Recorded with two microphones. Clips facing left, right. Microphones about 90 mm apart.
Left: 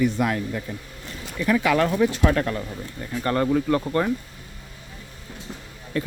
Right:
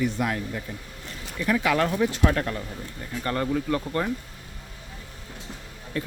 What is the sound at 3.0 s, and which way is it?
Speech, 55° left (ahead or behind).